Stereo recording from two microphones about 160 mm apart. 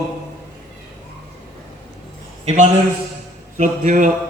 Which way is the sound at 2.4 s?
45° right (ahead or behind).